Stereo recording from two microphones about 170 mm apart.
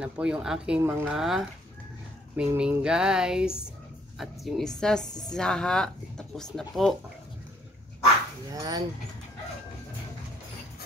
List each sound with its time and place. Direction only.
0.0 s speech: 5° right (ahead or behind)
8.5 s speech: 20° right (ahead or behind)